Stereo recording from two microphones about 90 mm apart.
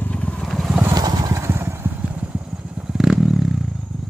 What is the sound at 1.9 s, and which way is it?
Vehicle, 15° right (ahead or behind).